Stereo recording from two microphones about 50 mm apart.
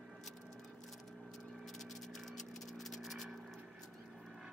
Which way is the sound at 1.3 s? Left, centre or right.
Centre.